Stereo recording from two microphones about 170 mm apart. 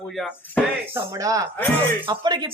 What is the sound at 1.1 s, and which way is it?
Speech, 20° right (ahead or behind).